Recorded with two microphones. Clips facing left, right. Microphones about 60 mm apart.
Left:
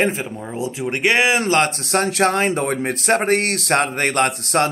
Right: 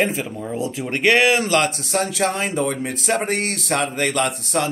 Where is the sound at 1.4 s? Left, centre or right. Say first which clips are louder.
Left 1 dB; left.